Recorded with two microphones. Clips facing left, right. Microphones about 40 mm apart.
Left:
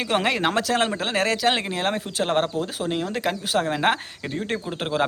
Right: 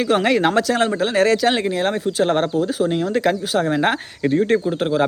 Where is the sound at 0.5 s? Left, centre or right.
Left.